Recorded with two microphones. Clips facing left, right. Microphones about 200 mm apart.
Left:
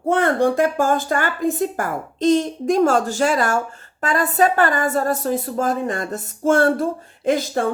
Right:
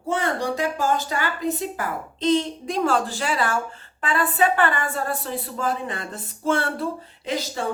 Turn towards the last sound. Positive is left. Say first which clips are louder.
# left 8 dB
turn(degrees=50)  # may be behind; listen again after turning